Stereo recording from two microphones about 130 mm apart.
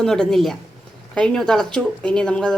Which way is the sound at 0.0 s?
5° left (ahead or behind).